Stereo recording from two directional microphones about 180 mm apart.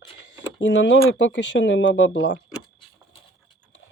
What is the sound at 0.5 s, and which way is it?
Speech, 90° left.